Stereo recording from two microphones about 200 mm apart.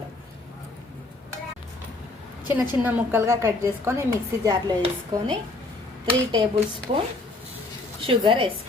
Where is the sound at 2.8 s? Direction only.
10° right (ahead or behind).